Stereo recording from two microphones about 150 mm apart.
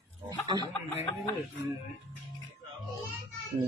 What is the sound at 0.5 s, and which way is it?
Snicker, 25° right (ahead or behind).